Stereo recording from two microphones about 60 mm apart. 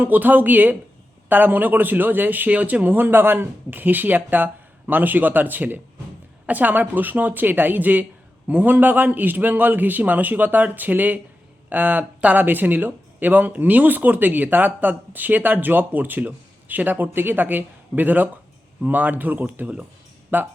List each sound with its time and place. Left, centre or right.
0.0 s a man's voice: right